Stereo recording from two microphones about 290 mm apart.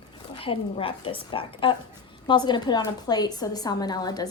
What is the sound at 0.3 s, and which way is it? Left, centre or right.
A woman's voice, centre.